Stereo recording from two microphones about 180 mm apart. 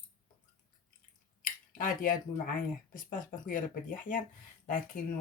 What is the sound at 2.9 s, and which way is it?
Speech, 50° left (ahead or behind).